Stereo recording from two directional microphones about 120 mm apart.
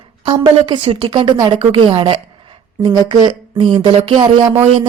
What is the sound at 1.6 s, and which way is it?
Speech, 50° right (ahead or behind).